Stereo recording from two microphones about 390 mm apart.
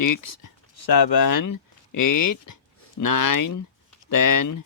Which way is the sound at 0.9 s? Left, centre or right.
Left.